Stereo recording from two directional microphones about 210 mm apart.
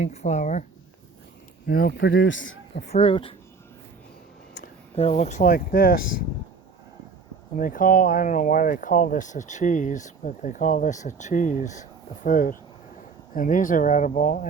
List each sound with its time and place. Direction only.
0.0 s speech: 35° left (ahead or behind)
1.6 s a man's voice: 45° left (ahead or behind)
2.9 s speech: 25° left (ahead or behind)
4.9 s speech: 30° left (ahead or behind)
7.5 s speech: 40° left (ahead or behind)